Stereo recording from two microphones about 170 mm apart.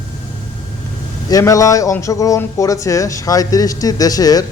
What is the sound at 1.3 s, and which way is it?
Speech, 20° left (ahead or behind).